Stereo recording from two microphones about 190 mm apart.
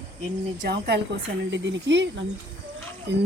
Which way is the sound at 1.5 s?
70° right (ahead or behind).